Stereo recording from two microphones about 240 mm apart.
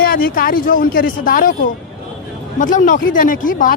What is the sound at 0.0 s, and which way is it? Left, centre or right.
Speech, left.